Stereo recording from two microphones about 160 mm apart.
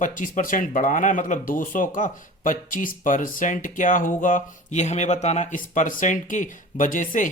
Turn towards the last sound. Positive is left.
turn(degrees=55)  # may be behind; listen again after turning